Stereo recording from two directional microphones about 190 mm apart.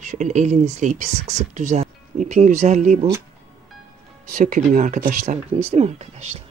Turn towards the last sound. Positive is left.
turn(degrees=-35)  # may be behind; listen again after turning